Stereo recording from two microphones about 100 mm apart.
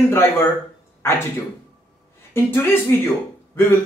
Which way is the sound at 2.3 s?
25° left (ahead or behind).